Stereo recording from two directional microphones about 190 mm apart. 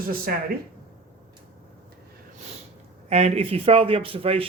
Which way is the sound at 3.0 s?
35° right (ahead or behind).